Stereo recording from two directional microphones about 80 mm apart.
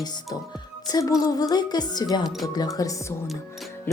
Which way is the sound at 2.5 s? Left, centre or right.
Left.